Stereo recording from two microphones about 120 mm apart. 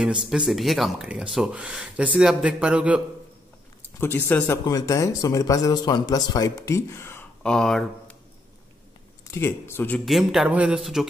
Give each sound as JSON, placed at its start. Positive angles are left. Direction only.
{"t": 0.5, "sound": "speech", "side_deg": 0}
{"t": 4.0, "sound": "speech", "side_deg": 15}
{"t": 4.6, "sound": "speech", "side_deg": 30}
{"t": 7.4, "sound": "speech", "side_deg": 5}
{"t": 9.3, "sound": "speech", "side_deg": 20}
{"t": 10.0, "sound": "speech", "side_deg": 0}